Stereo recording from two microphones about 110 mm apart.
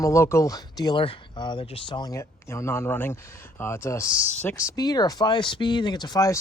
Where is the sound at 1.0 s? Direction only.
50° left (ahead or behind).